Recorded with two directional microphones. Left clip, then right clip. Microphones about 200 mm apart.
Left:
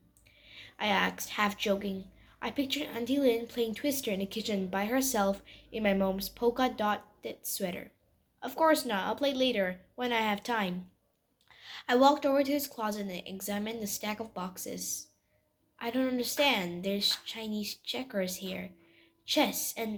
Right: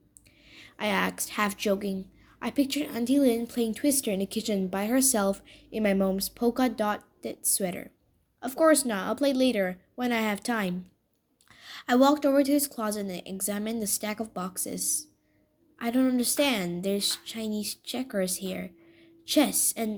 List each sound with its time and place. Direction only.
0.4 s a woman's voice: 50° right (ahead or behind)
15.8 s a woman's voice: 50° right (ahead or behind)